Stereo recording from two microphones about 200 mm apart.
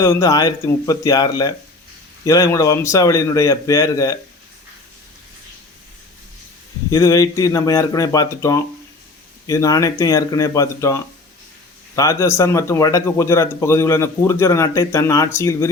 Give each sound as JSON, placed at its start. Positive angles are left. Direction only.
{"t": 0.0, "sound": "speech", "side_deg": 15}
{"t": 6.9, "sound": "speech", "side_deg": 15}